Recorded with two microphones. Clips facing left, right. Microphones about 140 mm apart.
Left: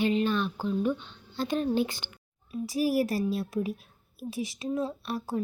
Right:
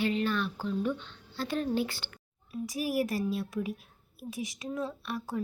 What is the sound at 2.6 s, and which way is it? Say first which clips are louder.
A woman's voice: left 4 dB; 35° left (ahead or behind).